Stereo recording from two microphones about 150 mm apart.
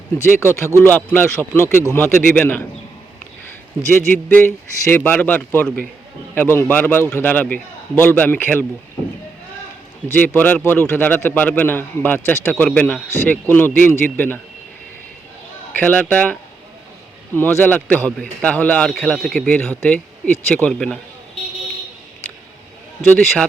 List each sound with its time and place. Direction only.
0.3 s a man's voice: 15° left (ahead or behind)
3.9 s a man's voice: 10° left (ahead or behind)
10.1 s a man's voice: 10° left (ahead or behind)
15.8 s a man's voice: 10° left (ahead or behind)
23.0 s a man's voice: 5° left (ahead or behind)